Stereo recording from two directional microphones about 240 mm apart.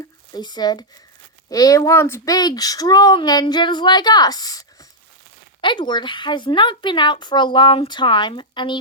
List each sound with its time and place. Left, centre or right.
0.3 s a woman's voice: centre